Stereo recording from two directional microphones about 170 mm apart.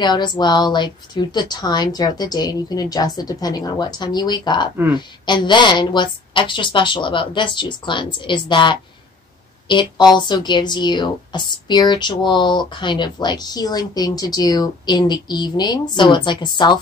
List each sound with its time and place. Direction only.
0.0 s a woman's voice: 25° left (ahead or behind)